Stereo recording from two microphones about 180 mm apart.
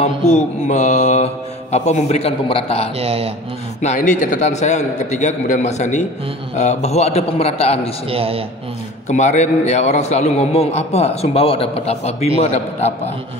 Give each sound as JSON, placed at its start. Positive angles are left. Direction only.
{"t": 0.0, "sound": "a man's voice", "side_deg": 40}
{"t": 3.0, "sound": "a man's voice", "side_deg": -35}
{"t": 3.8, "sound": "a man's voice", "side_deg": 45}
{"t": 8.1, "sound": "a man's voice", "side_deg": -30}
{"t": 9.1, "sound": "a man's voice", "side_deg": 40}